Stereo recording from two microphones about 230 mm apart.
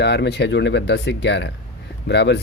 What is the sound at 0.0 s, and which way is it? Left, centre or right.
Speech, left.